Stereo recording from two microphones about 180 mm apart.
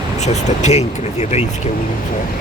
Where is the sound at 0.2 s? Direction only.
40° left (ahead or behind).